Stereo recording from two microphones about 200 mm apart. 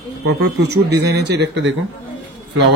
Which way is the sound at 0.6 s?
55° right (ahead or behind).